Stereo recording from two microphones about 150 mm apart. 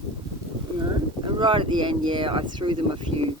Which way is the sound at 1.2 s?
35° right (ahead or behind).